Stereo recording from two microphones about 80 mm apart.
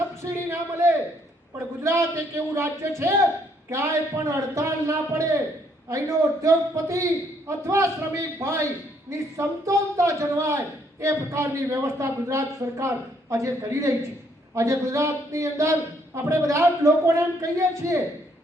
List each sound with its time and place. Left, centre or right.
0.2 s a man's voice: right